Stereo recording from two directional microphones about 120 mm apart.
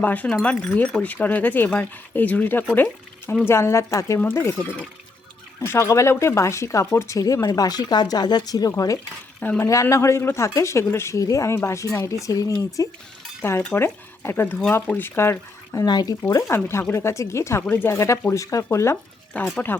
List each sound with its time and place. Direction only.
0.0 s speech: 15° left (ahead or behind); by 9.0 s 30° left (ahead or behind)
9.4 s speech: 15° left (ahead or behind); by 16.1 s 35° left (ahead or behind)
16.3 s speech: 20° left (ahead or behind)
19.3 s speech: 10° left (ahead or behind)